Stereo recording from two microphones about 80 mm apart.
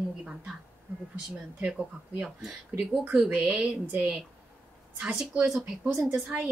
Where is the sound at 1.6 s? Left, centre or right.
Centre.